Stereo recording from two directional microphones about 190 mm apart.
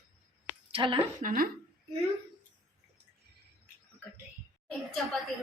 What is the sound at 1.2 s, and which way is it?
Speech, 45° right (ahead or behind).